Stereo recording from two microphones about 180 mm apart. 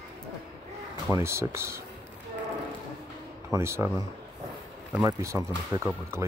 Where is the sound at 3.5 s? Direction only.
15° right (ahead or behind).